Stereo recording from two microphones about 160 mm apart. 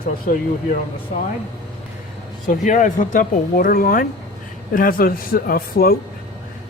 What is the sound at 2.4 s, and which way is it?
Speech, 50° left (ahead or behind).